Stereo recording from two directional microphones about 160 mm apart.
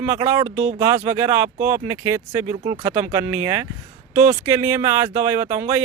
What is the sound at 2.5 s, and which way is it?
Speech, 30° right (ahead or behind).